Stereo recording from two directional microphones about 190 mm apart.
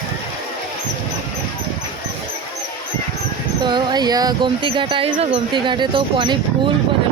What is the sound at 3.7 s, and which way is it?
Speech, 20° right (ahead or behind).